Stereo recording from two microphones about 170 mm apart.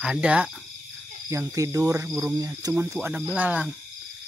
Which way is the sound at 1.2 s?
20° right (ahead or behind).